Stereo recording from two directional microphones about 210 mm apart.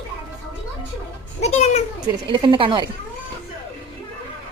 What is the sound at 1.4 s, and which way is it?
Speech, 30° left (ahead or behind).